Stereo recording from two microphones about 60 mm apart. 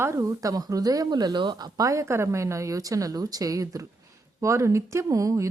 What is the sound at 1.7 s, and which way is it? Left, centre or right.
A woman's voice, right.